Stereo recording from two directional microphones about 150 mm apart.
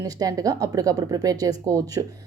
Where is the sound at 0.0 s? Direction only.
25° right (ahead or behind).